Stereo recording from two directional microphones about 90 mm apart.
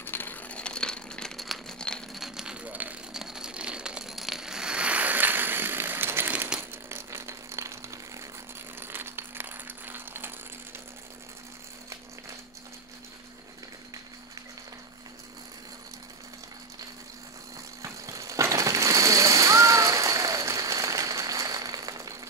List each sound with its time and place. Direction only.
0.0 s crumpling: 20° left (ahead or behind); by 3.0 s 15° right (ahead or behind)
3.1 s a sound: 5° right (ahead or behind); by 10.3 s 25° right (ahead or behind)
17.8 s splash: 35° right (ahead or behind)